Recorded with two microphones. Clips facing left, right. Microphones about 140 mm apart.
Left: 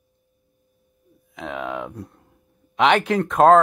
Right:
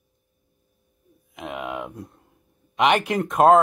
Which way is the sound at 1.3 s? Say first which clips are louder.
Left 2 dB; 10° right (ahead or behind).